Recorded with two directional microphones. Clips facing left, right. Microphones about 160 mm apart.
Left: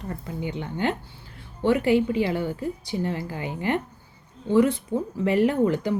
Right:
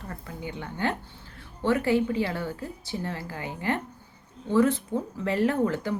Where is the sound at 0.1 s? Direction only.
20° left (ahead or behind).